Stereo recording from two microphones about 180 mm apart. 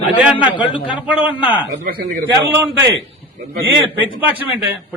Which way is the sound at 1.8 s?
55° right (ahead or behind).